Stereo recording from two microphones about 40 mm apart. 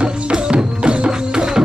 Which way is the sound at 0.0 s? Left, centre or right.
Right.